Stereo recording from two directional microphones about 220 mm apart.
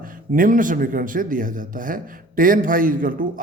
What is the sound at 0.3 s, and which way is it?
Speech, 40° right (ahead or behind).